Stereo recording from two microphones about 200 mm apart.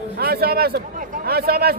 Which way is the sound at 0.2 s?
50° right (ahead or behind).